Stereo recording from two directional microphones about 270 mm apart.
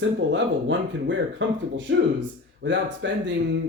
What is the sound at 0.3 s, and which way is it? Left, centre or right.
Speech, right.